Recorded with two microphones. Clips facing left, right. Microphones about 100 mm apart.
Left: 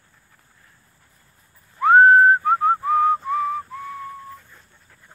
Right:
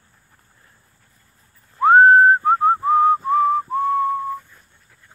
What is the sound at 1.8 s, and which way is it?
Whistling, 30° right (ahead or behind).